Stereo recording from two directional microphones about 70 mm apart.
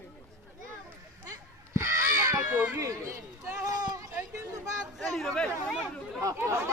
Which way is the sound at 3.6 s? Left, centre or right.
Right.